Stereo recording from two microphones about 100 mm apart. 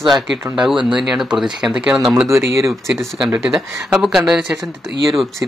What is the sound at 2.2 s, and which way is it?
Speech, 30° right (ahead or behind).